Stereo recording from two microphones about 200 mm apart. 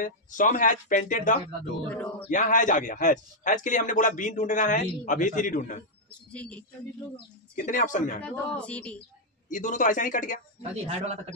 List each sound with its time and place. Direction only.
0.0 s a man's voice: 40° left (ahead or behind)
1.9 s speech: 5° left (ahead or behind)
2.3 s a man's voice: 40° left (ahead or behind)
6.0 s speech: 5° left (ahead or behind)
7.5 s a man's voice: 40° left (ahead or behind)
8.2 s speech: 5° left (ahead or behind)
9.5 s a man's voice: 40° left (ahead or behind)
10.6 s speech: 30° right (ahead or behind)